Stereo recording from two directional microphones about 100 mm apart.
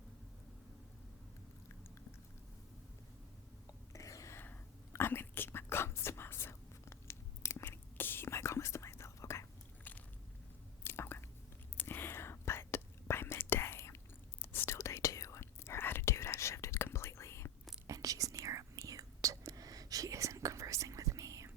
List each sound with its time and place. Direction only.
3.9 s whispering: 35° left (ahead or behind)
10.8 s chewing: 25° left (ahead or behind)
11.8 s whispering: 20° left (ahead or behind)
17.8 s whispering: 35° right (ahead or behind)